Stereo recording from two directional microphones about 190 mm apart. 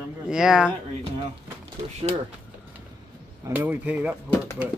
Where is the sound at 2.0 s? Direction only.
35° right (ahead or behind).